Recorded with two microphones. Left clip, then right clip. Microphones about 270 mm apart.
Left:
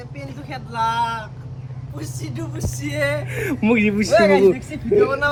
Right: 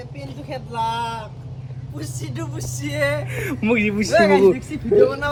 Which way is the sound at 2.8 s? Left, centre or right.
Centre.